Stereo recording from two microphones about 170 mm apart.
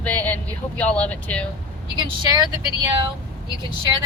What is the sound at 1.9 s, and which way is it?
Speech, 25° right (ahead or behind).